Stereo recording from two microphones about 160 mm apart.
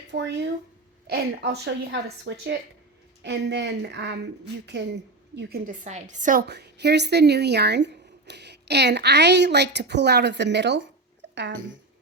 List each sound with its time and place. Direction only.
0.1 s a woman's voice: 90° right
5.8 s a woman's voice: 50° right (ahead or behind)
6.5 s speech: 90° right
11.2 s a sound: 90° right